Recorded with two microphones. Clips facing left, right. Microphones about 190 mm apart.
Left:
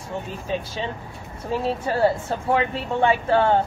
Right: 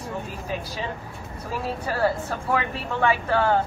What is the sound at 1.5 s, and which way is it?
A woman's voice, 25° left (ahead or behind).